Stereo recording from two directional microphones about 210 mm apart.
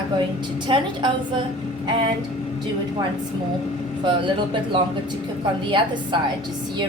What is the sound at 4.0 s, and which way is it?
A woman's voice, 25° right (ahead or behind).